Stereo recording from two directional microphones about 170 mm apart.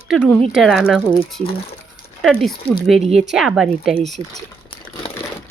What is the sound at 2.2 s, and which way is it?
Speech, 5° left (ahead or behind).